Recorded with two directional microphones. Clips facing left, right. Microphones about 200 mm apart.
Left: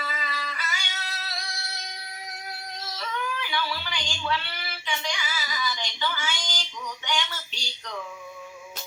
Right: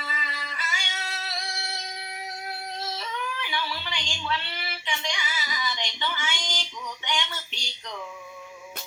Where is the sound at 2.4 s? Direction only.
25° right (ahead or behind).